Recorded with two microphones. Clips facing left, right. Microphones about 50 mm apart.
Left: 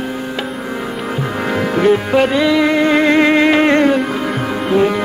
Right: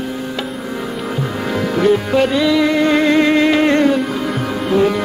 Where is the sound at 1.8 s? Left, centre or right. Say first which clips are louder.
Left 1 dB; left.